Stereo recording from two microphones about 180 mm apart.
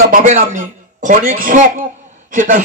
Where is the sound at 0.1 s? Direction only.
45° right (ahead or behind).